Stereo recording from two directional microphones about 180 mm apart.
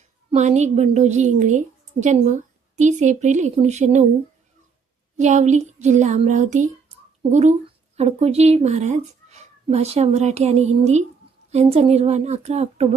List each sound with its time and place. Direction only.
0.3 s speech: 40° right (ahead or behind)
5.1 s speech: 40° right (ahead or behind)